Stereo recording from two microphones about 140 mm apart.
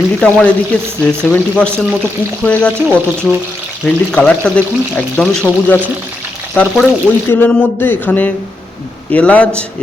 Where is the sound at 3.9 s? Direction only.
10° left (ahead or behind).